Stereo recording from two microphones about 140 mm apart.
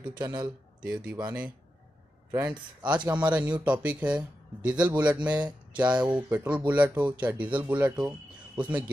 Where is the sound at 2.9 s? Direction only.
10° right (ahead or behind).